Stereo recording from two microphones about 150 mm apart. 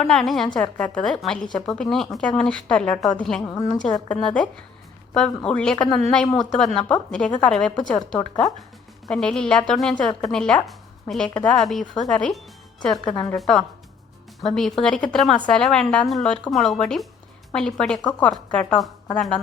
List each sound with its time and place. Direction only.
0.0 s a woman's voice: centre (ahead or behind)
3.5 s a woman's voice: 25° left (ahead or behind)
3.8 s a woman's voice: 5° left (ahead or behind)